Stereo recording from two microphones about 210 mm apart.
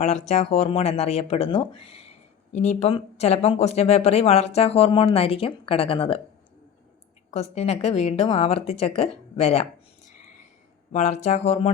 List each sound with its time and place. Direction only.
0.0 s speech: 30° left (ahead or behind)
7.3 s speech: 30° left (ahead or behind)
10.9 s speech: 35° left (ahead or behind)